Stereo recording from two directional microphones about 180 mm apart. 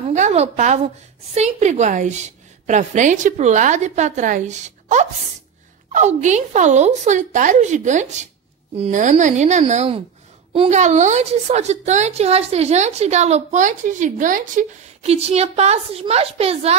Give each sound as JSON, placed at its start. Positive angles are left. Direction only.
{"t": 0.1, "sound": "a woman's voice", "side_deg": -40}